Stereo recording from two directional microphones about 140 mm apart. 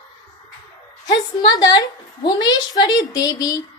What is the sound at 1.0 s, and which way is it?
A woman's voice, 30° left (ahead or behind).